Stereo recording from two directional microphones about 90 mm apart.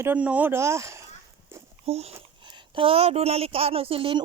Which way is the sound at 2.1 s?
70° right (ahead or behind).